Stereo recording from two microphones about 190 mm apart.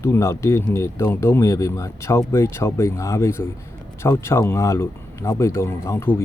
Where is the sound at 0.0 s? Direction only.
15° left (ahead or behind).